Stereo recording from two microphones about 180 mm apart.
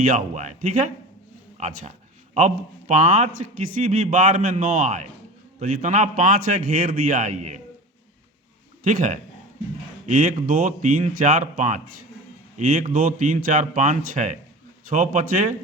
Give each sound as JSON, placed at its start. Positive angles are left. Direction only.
{"t": 0.0, "sound": "speech", "side_deg": -45}
{"t": 8.8, "sound": "speech", "side_deg": -45}